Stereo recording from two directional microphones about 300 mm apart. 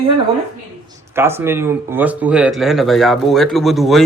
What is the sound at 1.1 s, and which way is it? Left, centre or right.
Speech, centre.